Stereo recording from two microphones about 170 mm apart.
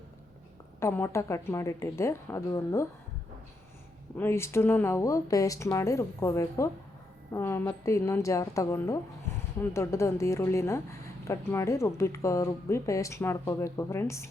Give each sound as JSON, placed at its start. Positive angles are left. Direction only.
{"t": 0.8, "sound": "speech", "side_deg": 15}
{"t": 4.2, "sound": "speech", "side_deg": 15}